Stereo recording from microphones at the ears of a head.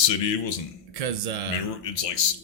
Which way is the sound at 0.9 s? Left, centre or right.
Right.